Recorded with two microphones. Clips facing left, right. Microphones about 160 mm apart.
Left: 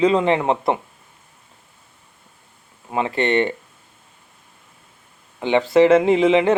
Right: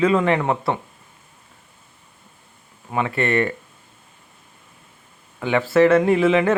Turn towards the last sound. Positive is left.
turn(degrees=20)  # may be behind; listen again after turning